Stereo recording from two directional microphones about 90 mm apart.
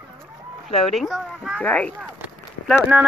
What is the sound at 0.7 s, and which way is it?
Speech, centre (ahead or behind).